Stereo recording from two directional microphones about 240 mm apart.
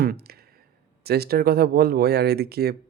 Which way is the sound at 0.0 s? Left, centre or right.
Right.